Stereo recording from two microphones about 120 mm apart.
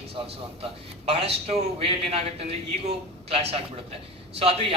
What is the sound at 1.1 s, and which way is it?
A man's voice, 55° right (ahead or behind).